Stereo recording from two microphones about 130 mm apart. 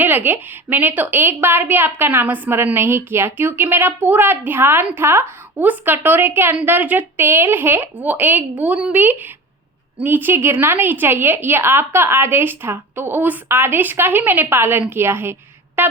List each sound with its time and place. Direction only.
0.0 s a woman's voice: 15° right (ahead or behind)